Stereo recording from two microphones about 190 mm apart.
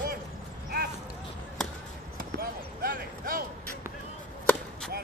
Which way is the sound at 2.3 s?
50° right (ahead or behind).